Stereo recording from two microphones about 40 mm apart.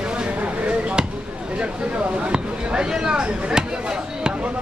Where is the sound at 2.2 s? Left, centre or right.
Right.